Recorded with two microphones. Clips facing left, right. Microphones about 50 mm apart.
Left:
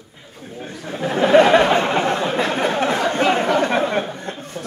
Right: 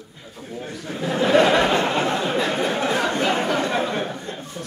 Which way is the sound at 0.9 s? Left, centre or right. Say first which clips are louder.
Left 4 dB; left.